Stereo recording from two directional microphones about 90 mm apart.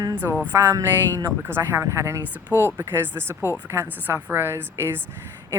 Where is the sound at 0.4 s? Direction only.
30° right (ahead or behind).